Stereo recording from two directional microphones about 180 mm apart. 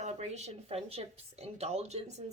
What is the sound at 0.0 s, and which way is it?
Speech, 40° right (ahead or behind).